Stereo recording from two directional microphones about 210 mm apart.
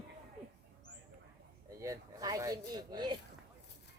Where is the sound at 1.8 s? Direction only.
15° right (ahead or behind).